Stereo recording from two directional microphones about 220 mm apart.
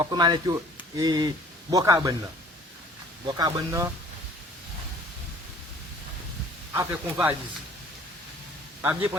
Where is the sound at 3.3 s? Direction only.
20° right (ahead or behind).